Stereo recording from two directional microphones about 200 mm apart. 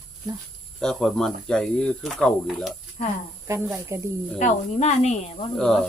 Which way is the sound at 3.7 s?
15° right (ahead or behind).